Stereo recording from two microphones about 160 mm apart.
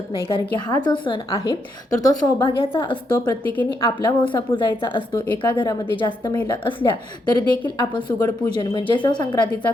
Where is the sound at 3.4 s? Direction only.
10° left (ahead or behind).